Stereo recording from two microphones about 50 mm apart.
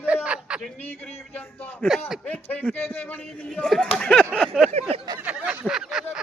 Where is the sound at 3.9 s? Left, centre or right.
Centre.